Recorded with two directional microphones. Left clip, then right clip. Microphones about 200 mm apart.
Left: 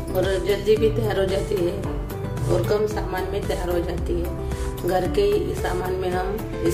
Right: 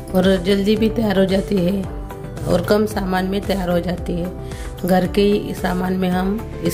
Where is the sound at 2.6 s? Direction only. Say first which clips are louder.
Right 4 dB; 55° right (ahead or behind).